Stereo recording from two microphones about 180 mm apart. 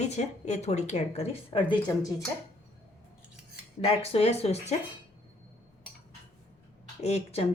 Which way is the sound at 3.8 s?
30° left (ahead or behind).